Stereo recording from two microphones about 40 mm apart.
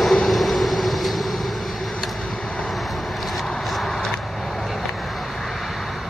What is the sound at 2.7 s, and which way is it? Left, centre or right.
Vehicle, centre.